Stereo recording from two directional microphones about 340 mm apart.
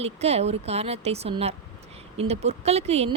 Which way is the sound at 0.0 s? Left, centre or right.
Centre.